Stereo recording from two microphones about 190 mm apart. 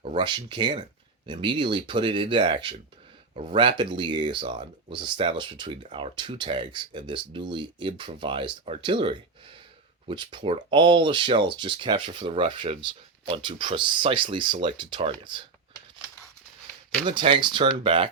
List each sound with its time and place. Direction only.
0.0 s speech: 25° right (ahead or behind)
17.1 s speech: 25° right (ahead or behind)